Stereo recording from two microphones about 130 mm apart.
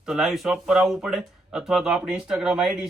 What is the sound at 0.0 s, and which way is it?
A man's voice, 5° right (ahead or behind).